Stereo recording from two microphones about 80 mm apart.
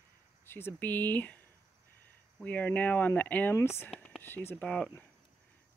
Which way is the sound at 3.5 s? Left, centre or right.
Left.